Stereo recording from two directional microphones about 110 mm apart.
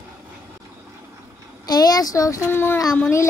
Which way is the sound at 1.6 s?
35° left (ahead or behind).